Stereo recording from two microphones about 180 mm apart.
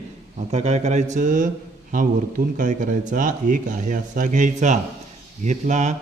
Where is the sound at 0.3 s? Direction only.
35° right (ahead or behind).